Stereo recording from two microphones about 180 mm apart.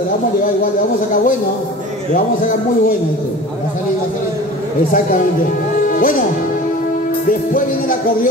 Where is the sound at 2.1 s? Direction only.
45° left (ahead or behind).